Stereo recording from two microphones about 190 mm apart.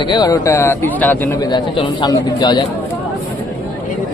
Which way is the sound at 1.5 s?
25° left (ahead or behind).